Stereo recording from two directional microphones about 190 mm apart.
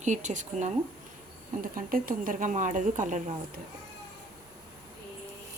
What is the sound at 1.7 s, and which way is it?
Speech, 45° right (ahead or behind).